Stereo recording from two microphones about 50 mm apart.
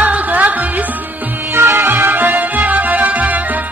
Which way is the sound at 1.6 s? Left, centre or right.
Right.